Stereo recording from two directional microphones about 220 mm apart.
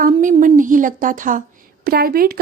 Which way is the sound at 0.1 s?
35° right (ahead or behind).